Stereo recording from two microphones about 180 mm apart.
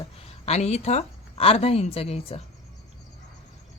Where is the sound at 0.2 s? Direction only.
35° left (ahead or behind).